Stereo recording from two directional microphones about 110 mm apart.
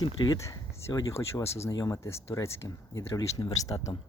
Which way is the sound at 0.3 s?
25° left (ahead or behind).